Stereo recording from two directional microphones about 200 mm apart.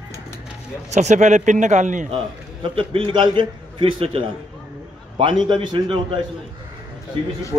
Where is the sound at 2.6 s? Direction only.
25° right (ahead or behind).